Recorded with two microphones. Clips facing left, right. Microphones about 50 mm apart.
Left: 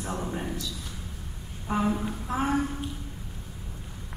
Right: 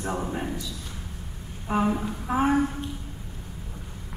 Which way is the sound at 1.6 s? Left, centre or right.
Centre.